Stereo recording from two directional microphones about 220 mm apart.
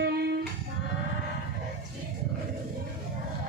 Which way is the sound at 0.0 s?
45° right (ahead or behind).